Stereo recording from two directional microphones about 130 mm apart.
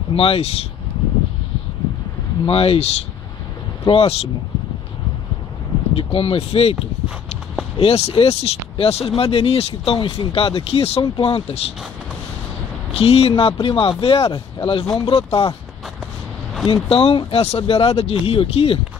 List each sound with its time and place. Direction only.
0.1 s speech: 45° left (ahead or behind)
2.4 s speech: 45° left (ahead or behind)
5.9 s speech: 45° left (ahead or behind)
7.8 s speech: 50° left (ahead or behind)
12.9 s speech: 50° left (ahead or behind)
16.9 s speech: 45° left (ahead or behind)